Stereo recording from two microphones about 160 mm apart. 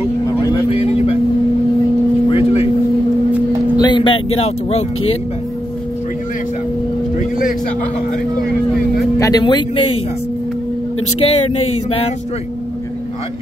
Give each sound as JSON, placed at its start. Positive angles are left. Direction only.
{"t": 0.7, "sound": "vehicle", "side_deg": 40}
{"t": 2.2, "sound": "vehicle", "side_deg": 40}
{"t": 3.7, "sound": "vehicle", "side_deg": 30}
{"t": 7.2, "sound": "vehicle", "side_deg": 60}
{"t": 9.2, "sound": "speech", "side_deg": 25}
{"t": 11.2, "sound": "mantra", "side_deg": 40}